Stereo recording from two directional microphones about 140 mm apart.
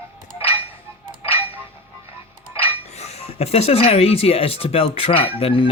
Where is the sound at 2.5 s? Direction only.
50° left (ahead or behind).